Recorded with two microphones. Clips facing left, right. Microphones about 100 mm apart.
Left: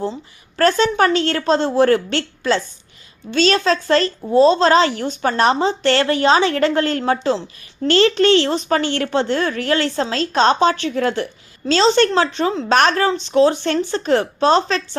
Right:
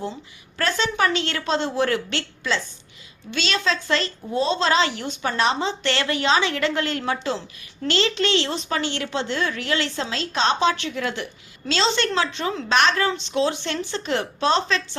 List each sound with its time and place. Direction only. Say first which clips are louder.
0.5 s a woman's voice: left 8 dB; 45° left (ahead or behind)
12.7 s a woman's voice: left 4 dB; 45° left (ahead or behind)